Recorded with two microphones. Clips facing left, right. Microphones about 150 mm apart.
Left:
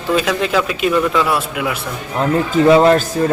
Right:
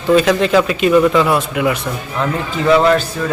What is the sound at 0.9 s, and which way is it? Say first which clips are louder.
Speech: right 5 dB; 10° right (ahead or behind).